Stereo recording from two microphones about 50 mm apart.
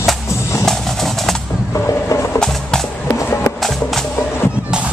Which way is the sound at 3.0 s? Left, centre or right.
Left.